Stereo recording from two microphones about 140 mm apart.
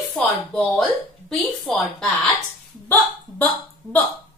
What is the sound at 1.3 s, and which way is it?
A woman's voice, 5° left (ahead or behind).